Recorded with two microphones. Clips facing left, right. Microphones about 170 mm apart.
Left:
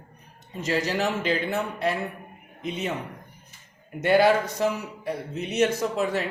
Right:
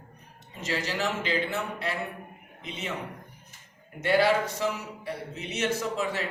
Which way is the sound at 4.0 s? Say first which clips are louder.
Left 4 dB; 50° left (ahead or behind).